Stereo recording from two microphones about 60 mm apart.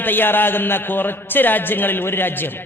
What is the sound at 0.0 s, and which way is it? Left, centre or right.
A man's voice, left.